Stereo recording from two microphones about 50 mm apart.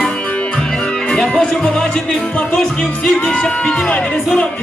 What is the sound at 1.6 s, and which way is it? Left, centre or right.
Speech, centre.